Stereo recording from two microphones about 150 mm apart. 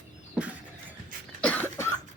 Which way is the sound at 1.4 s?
10° left (ahead or behind).